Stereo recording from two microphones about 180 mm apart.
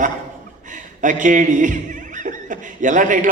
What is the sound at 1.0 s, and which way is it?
A man's voice, 45° right (ahead or behind).